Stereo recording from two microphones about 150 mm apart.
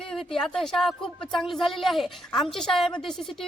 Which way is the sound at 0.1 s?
Centre (ahead or behind).